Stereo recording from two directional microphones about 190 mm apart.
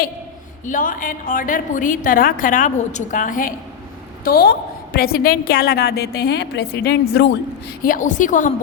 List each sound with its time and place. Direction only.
0.6 s a woman's voice: 45° left (ahead or behind)
7.8 s a woman's voice: 45° left (ahead or behind)